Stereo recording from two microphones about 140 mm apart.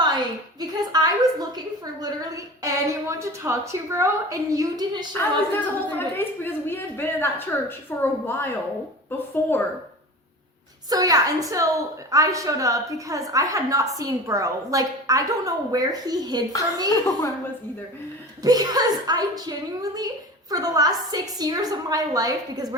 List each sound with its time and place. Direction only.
0.0 s a sound: 30° right (ahead or behind)
2.0 s a woman's voice: 25° right (ahead or behind)
5.5 s a woman's voice: 15° left (ahead or behind)
10.8 s a woman's voice: 25° right (ahead or behind)
18.4 s a woman's voice: 30° right (ahead or behind)